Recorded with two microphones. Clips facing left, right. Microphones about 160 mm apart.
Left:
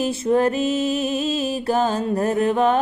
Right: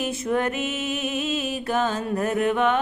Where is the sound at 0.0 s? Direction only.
30° left (ahead or behind).